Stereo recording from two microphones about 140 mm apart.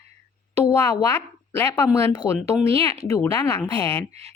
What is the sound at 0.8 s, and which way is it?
Speech, 25° left (ahead or behind).